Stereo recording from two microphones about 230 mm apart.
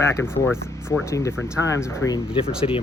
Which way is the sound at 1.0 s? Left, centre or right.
Centre.